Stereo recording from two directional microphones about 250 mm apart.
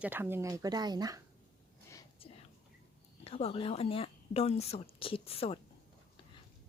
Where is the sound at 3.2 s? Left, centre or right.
Left.